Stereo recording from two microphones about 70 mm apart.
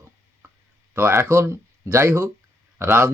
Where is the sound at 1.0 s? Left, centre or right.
Right.